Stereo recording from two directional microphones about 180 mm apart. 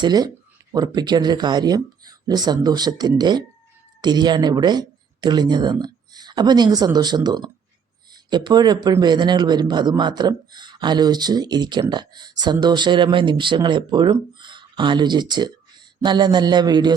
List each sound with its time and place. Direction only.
0.0 s a man's voice: 20° right (ahead or behind)